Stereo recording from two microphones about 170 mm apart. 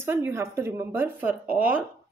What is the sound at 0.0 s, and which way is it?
A woman's voice, 15° right (ahead or behind).